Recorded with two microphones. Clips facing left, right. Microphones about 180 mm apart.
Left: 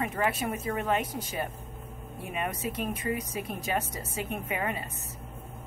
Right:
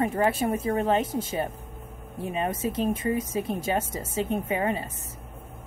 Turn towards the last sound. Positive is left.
turn(degrees=-30)  # may be behind; listen again after turning